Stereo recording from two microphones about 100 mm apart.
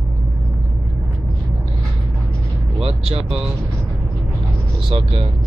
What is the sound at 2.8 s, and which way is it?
Speech, 85° right.